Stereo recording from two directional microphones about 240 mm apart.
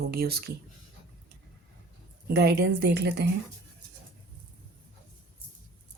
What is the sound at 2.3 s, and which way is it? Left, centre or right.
Speech, right.